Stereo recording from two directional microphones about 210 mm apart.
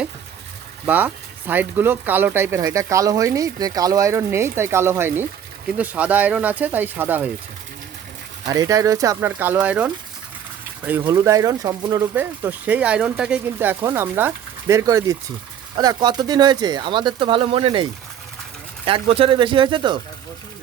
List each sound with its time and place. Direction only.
0.9 s speech: 10° right (ahead or behind)
8.4 s speech: 15° right (ahead or behind)
18.9 s speech: 25° right (ahead or behind)